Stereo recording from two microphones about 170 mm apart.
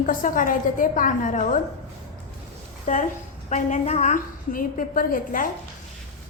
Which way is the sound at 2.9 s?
45° left (ahead or behind).